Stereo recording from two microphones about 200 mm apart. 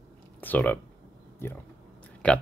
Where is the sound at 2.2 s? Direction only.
5° left (ahead or behind).